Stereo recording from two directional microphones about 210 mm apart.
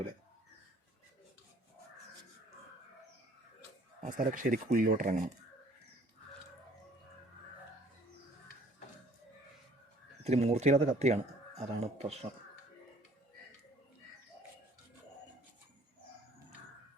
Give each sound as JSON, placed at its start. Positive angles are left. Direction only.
{"t": 4.0, "sound": "speech", "side_deg": -40}
{"t": 10.2, "sound": "speech", "side_deg": -30}